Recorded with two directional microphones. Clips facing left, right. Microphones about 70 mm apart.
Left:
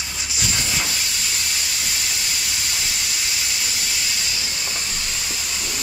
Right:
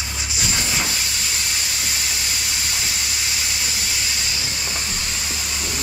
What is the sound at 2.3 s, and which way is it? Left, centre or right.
Steam, centre.